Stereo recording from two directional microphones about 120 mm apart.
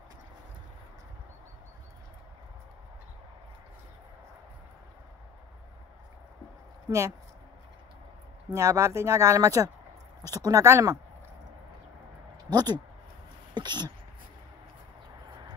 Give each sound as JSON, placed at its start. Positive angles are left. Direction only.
{"t": 6.9, "sound": "speech", "side_deg": -25}
{"t": 8.5, "sound": "speech", "side_deg": -25}
{"t": 12.4, "sound": "speech", "side_deg": -35}